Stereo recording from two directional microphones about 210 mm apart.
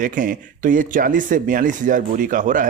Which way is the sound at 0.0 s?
40° right (ahead or behind).